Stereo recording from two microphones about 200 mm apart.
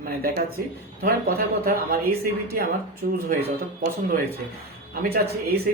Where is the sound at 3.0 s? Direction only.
45° right (ahead or behind).